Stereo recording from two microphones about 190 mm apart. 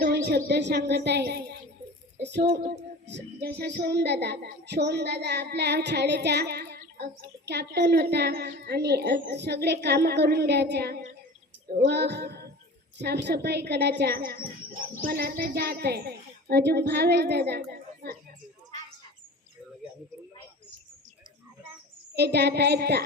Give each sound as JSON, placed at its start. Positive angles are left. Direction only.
{"t": 0.0, "sound": "a woman's voice", "side_deg": -60}
{"t": 3.1, "sound": "child singing", "side_deg": -65}
{"t": 14.0, "sound": "a child's voice", "side_deg": -50}
{"t": 14.8, "sound": "child singing", "side_deg": -50}
{"t": 22.1, "sound": "child singing", "side_deg": -60}